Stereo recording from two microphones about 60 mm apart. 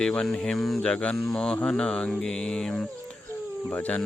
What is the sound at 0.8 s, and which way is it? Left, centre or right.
Speech, centre.